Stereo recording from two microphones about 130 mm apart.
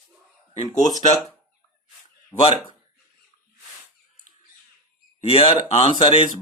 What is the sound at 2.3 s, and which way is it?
Speech, 15° left (ahead or behind).